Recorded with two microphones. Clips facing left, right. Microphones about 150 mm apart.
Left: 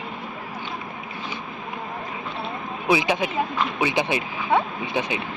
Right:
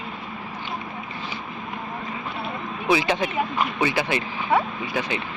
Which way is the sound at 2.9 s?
15° left (ahead or behind).